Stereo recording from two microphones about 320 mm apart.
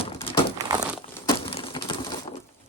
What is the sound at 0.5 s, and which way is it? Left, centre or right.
Crumpling, centre.